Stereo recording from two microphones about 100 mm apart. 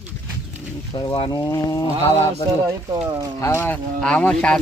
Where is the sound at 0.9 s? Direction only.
45° left (ahead or behind).